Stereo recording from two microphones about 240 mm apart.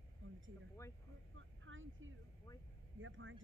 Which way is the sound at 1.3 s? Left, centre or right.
Right.